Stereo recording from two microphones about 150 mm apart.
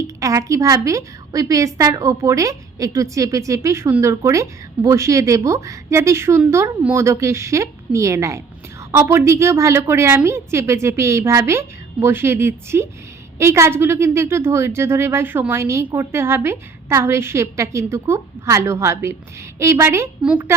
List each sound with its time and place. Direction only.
0.2 s a woman's voice: 20° right (ahead or behind)